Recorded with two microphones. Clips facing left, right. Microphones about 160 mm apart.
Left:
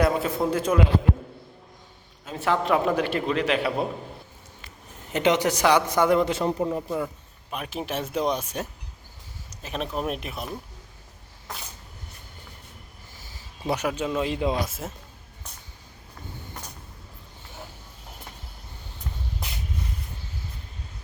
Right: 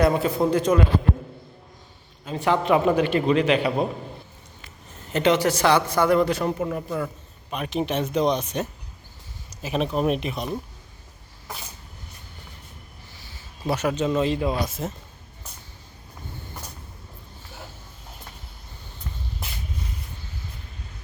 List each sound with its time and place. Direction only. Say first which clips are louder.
0.0 s a man's voice: right 3 dB; centre (ahead or behind)
2.2 s a man's voice: right 3 dB; centre (ahead or behind)
5.1 s a man's voice: right 2 dB; 15° left (ahead or behind)
7.5 s speech: right 5 dB; 5° left (ahead or behind)
9.6 s a man's voice: right 6 dB; centre (ahead or behind)
13.7 s a man's voice: right 3 dB; 10° left (ahead or behind)